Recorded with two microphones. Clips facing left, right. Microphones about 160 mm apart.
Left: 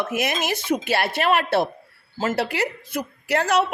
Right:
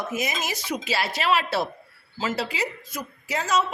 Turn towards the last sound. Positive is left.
turn(degrees=65)  # may be behind; listen again after turning